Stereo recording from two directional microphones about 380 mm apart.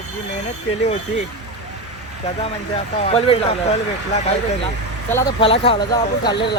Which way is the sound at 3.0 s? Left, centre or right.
Centre.